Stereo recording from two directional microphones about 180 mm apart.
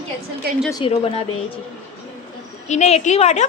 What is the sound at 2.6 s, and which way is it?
Speech, 40° left (ahead or behind).